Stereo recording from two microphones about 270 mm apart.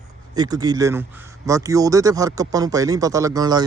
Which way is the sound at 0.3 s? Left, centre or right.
Centre.